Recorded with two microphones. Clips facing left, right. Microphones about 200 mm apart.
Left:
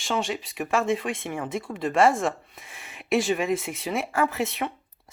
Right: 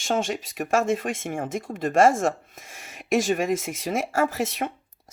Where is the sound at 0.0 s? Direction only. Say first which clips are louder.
Right 2 dB; 50° right (ahead or behind).